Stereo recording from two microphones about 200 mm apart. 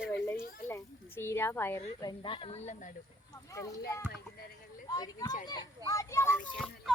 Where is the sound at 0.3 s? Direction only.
10° left (ahead or behind).